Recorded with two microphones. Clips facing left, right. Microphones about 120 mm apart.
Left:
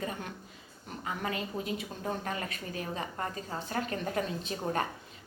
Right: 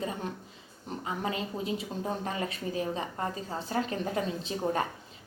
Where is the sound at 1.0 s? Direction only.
25° right (ahead or behind).